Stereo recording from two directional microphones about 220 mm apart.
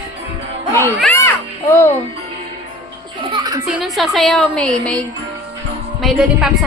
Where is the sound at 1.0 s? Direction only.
10° left (ahead or behind).